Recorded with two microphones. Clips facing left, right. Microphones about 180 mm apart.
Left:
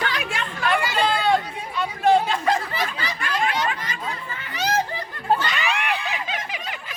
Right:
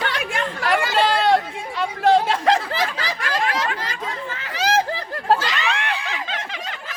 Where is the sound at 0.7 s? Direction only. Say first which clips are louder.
Right 3 dB; 85° right.